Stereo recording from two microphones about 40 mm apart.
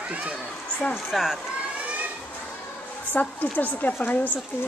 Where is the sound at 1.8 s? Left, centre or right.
Right.